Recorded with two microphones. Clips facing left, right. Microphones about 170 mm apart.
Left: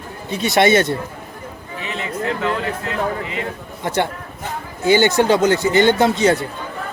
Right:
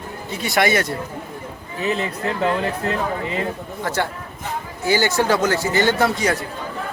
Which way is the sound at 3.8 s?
20° left (ahead or behind).